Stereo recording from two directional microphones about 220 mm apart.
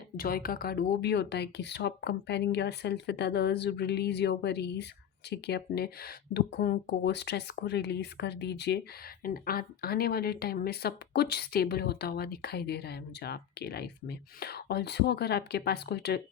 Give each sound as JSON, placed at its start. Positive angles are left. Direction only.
{"t": 0.2, "sound": "speech", "side_deg": 40}